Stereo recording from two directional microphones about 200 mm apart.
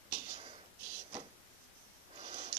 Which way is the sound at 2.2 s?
30° right (ahead or behind).